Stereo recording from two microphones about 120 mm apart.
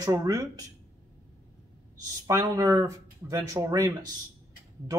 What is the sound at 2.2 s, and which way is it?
Speech, 30° right (ahead or behind).